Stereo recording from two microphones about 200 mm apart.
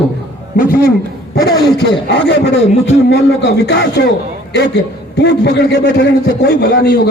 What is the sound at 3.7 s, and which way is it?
A man's voice, 60° left (ahead or behind).